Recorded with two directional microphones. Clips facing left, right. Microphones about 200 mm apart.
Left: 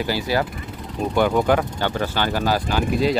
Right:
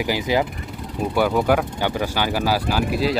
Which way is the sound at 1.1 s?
5° right (ahead or behind).